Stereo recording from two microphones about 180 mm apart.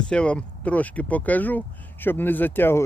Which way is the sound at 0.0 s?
5° left (ahead or behind).